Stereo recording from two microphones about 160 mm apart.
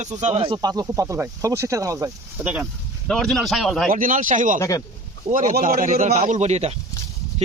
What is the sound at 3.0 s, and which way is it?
Speech, 5° left (ahead or behind).